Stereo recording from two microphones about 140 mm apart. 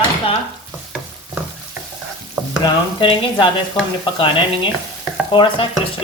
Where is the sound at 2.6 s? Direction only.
35° left (ahead or behind).